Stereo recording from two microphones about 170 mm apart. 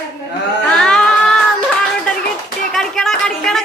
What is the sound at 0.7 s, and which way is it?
Music, 5° left (ahead or behind).